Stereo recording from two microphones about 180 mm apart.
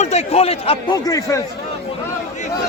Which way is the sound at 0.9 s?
20° left (ahead or behind).